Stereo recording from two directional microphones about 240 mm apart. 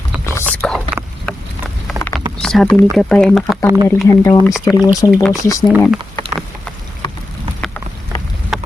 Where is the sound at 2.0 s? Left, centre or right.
Centre.